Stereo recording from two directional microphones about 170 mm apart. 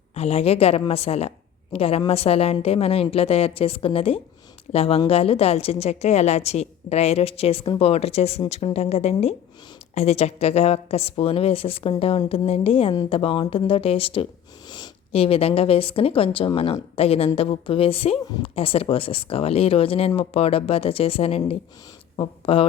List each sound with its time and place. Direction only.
0.1 s a woman's voice: 40° left (ahead or behind)